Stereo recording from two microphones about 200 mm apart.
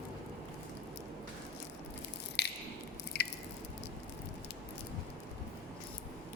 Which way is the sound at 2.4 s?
55° left (ahead or behind).